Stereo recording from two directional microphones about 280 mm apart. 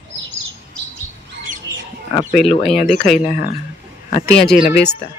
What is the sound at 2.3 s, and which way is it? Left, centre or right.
Speech, centre.